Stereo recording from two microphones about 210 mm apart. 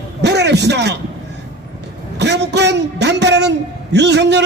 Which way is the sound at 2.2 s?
55° right (ahead or behind).